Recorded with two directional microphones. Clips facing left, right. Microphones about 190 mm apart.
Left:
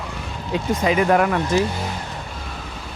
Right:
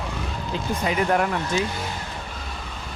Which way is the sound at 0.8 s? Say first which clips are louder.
Left 5 dB; 90° left.